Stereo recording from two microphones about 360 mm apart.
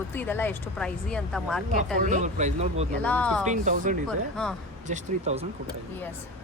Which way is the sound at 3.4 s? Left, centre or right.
Centre.